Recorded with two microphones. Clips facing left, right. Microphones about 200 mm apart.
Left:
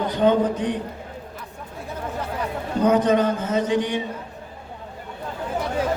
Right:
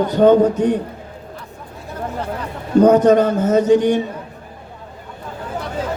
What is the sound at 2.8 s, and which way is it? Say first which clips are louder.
A man's voice: right 7 dB; 45° right (ahead or behind).